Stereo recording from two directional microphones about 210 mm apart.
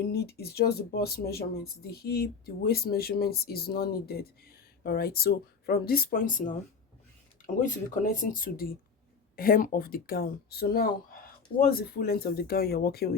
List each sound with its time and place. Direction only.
0.0 s speech: 50° left (ahead or behind)